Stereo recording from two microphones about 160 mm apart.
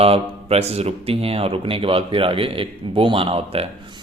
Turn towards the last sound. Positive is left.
turn(degrees=-35)  # may be behind; listen again after turning